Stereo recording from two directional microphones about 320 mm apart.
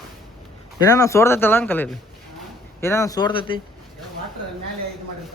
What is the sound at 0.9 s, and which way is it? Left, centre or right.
Speech, centre.